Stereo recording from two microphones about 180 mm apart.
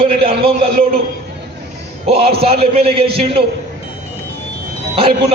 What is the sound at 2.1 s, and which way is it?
A man's voice, 35° right (ahead or behind).